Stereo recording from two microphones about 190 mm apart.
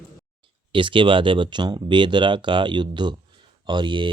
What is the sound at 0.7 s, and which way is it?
Speech, 25° right (ahead or behind).